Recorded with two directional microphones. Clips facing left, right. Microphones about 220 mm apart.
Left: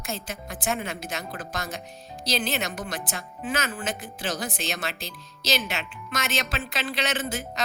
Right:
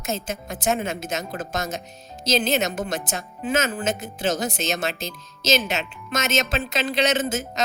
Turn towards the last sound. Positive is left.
turn(degrees=-20)  # may be behind; listen again after turning